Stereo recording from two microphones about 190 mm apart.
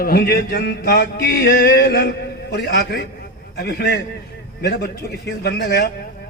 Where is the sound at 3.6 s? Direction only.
60° left (ahead or behind).